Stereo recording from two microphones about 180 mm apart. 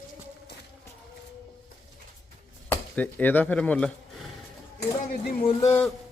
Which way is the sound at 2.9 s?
10° left (ahead or behind).